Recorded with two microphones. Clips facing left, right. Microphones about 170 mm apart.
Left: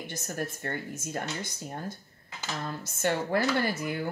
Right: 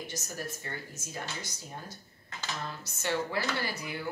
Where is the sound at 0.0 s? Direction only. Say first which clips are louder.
Left 4 dB; 55° left (ahead or behind).